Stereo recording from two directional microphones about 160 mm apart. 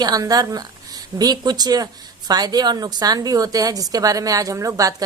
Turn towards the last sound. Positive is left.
turn(degrees=-20)  # may be behind; listen again after turning